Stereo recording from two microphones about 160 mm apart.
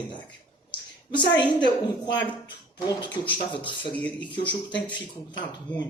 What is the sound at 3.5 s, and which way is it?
Speech, 30° left (ahead or behind).